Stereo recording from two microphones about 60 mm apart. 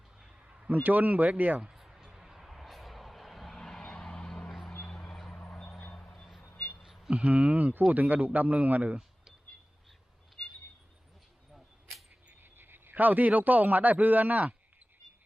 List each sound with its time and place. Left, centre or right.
0.4 s a man's voice: right
1.6 s vehicle: centre
4.4 s vehicle: centre
5.7 s a sound: centre
6.1 s vehicle: centre
6.5 s a sound: left
6.8 s a sound: centre
7.1 s speech: centre
12.4 s a man's voice: right